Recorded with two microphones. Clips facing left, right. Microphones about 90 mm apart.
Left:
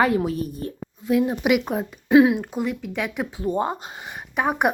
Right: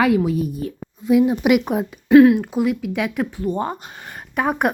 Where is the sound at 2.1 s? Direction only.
10° left (ahead or behind).